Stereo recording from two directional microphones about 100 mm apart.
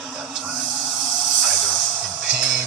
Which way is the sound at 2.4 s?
5° right (ahead or behind).